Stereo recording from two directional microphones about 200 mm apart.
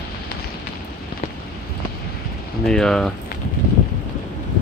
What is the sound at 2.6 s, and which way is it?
Speech, 5° left (ahead or behind).